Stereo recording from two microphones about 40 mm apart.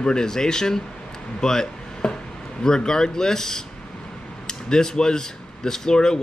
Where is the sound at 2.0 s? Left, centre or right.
Centre.